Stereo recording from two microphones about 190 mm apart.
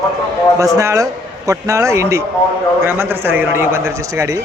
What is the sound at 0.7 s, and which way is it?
Speech, 15° right (ahead or behind).